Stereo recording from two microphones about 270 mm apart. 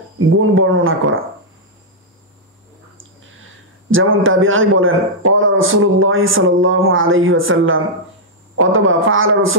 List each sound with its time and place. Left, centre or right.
0.3 s speech: right
3.9 s speech: right